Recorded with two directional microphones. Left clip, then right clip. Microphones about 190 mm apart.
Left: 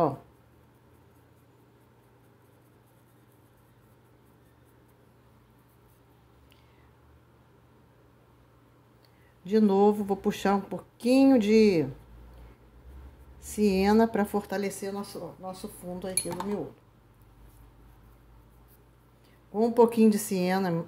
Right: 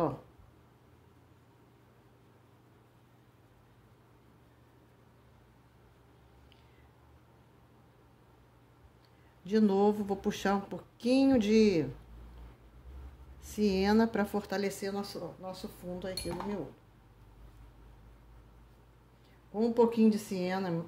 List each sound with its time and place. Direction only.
9.4 s speech: 15° left (ahead or behind)
13.6 s speech: 15° left (ahead or behind)
19.5 s speech: 25° left (ahead or behind)